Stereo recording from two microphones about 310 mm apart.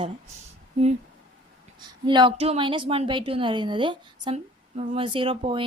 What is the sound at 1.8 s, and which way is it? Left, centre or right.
A woman's voice, centre.